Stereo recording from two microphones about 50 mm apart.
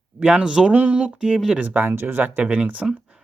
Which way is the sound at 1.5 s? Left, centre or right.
Right.